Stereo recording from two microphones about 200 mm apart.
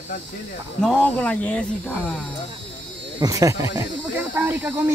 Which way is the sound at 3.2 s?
15° right (ahead or behind).